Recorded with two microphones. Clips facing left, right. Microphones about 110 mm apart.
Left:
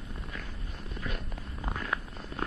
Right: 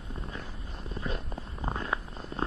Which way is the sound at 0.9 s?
30° right (ahead or behind).